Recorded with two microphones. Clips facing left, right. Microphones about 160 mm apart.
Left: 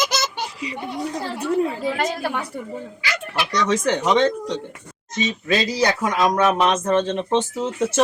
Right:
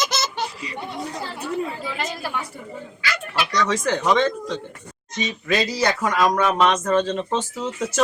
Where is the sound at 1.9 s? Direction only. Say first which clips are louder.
Left 4 dB; 55° left (ahead or behind).